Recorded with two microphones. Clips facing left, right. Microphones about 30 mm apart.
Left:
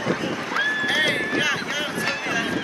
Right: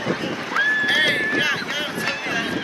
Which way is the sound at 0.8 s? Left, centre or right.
Right.